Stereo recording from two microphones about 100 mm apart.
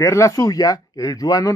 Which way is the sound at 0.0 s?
30° left (ahead or behind).